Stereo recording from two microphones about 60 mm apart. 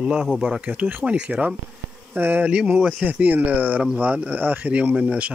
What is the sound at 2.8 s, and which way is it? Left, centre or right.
Speech, centre.